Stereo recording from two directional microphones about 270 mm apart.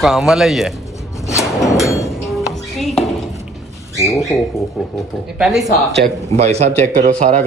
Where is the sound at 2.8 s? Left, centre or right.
Centre.